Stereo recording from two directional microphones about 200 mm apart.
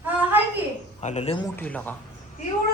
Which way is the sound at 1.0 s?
35° left (ahead or behind).